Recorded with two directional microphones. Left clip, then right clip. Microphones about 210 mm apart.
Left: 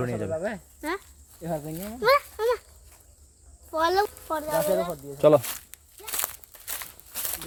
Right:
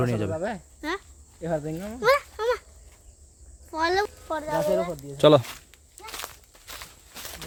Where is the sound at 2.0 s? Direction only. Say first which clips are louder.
Even; centre (ahead or behind).